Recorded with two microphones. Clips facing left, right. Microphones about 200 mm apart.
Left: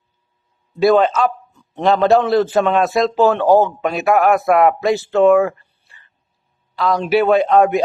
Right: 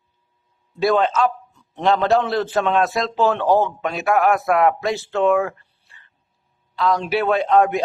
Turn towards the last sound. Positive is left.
turn(degrees=5)  # may be behind; listen again after turning